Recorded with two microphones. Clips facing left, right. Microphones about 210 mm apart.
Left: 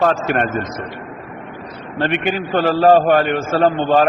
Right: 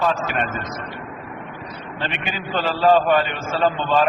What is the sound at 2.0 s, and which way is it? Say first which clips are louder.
A man's voice: left 10 dB; 60° left (ahead or behind).